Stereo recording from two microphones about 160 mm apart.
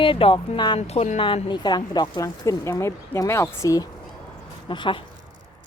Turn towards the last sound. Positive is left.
turn(degrees=30)  # may be behind; listen again after turning